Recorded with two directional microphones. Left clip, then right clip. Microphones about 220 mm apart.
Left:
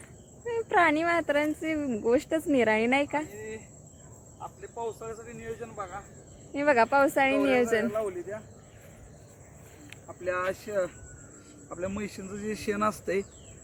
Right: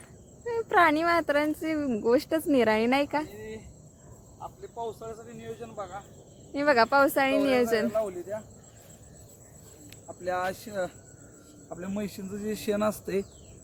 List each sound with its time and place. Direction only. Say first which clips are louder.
0.4 s a woman's voice: right 1 dB; 5° right (ahead or behind)
7.9 s speech: right 2 dB; 55° right (ahead or behind)
10.2 s speech: even; 45° right (ahead or behind)
12.3 s speech: right 2 dB; 40° right (ahead or behind)